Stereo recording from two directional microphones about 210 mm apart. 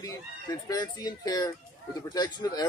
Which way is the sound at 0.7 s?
20° left (ahead or behind).